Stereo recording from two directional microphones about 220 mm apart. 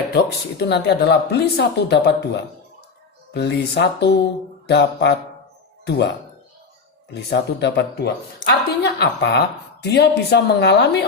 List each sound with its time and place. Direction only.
0.1 s speech: 50° left (ahead or behind)
7.3 s speech: 50° left (ahead or behind)